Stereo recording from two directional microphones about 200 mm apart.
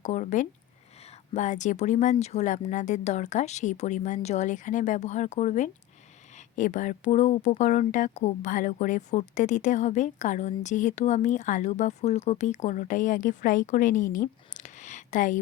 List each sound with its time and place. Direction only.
0.0 s speech: 35° left (ahead or behind)